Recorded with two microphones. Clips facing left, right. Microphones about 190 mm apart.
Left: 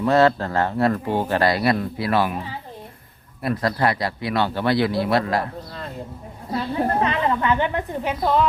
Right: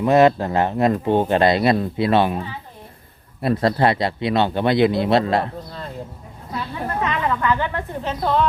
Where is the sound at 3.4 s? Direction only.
25° right (ahead or behind).